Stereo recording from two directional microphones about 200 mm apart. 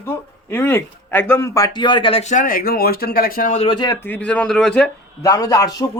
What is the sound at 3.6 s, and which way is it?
Speech, 25° left (ahead or behind).